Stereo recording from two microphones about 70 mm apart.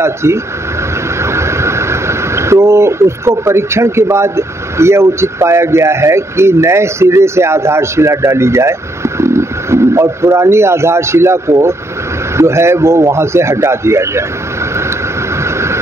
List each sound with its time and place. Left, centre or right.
0.0 s a man's voice: right
15.4 s vehicle: right